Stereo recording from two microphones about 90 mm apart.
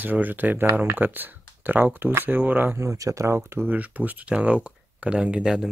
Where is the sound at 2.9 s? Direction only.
35° right (ahead or behind).